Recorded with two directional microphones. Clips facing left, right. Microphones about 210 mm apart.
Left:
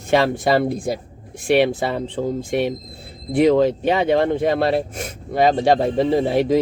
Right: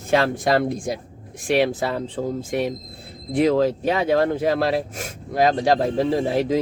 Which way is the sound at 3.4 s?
Centre (ahead or behind).